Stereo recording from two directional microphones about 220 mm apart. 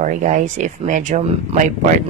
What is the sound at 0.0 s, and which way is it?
Speech, 35° right (ahead or behind).